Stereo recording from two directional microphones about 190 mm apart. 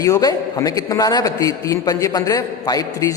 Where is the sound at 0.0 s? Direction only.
20° left (ahead or behind).